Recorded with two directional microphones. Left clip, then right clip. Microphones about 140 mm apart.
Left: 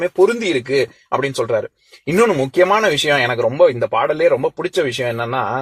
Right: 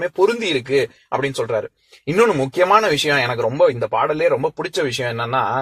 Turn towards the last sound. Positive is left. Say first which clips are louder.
# left 1 dB
turn(degrees=30)  # may be behind; listen again after turning